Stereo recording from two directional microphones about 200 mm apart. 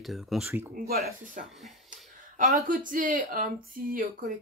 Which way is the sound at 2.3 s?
40° right (ahead or behind).